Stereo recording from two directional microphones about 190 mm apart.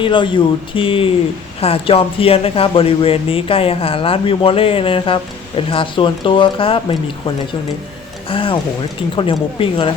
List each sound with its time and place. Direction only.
0.0 s speech: 25° left (ahead or behind)